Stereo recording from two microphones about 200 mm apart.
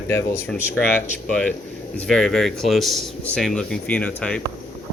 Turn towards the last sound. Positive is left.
turn(degrees=5)  # may be behind; listen again after turning